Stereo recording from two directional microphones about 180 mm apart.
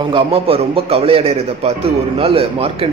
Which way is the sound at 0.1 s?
30° right (ahead or behind).